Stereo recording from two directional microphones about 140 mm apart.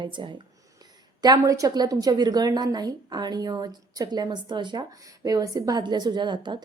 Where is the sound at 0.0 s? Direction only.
35° right (ahead or behind).